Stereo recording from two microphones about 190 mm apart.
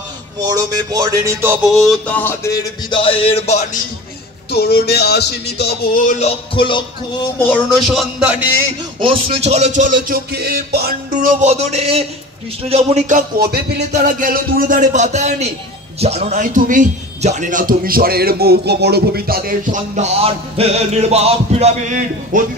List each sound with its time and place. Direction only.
0.5 s music: 20° right (ahead or behind); by 3.8 s 35° left (ahead or behind)
4.5 s music: 55° left (ahead or behind)
6.0 s music: 35° left (ahead or behind)
7.4 s music: centre (ahead or behind)
9.0 s a man's voice: 30° right (ahead or behind)
13.4 s a man's voice: 55° right (ahead or behind); by 22.4 s 40° right (ahead or behind)